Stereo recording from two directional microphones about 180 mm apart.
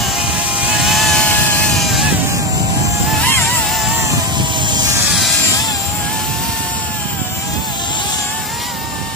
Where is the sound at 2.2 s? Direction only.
20° right (ahead or behind).